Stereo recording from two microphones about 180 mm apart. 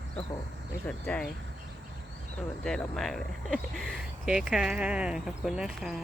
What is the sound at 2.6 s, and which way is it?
Speech, 5° left (ahead or behind).